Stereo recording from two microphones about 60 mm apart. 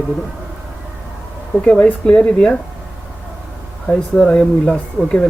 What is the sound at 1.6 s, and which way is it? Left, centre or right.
Speech, centre.